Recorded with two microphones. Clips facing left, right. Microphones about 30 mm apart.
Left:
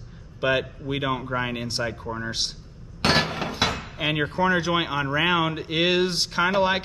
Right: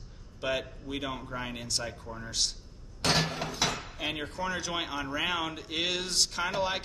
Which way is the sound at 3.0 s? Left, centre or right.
Left.